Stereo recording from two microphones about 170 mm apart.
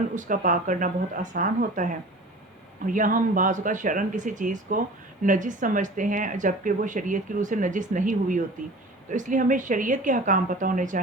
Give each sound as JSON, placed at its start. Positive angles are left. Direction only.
{"t": 0.1, "sound": "speech", "side_deg": -50}